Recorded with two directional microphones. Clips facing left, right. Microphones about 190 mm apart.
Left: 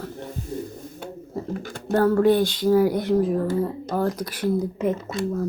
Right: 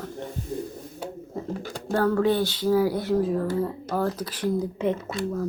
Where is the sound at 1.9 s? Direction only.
10° left (ahead or behind).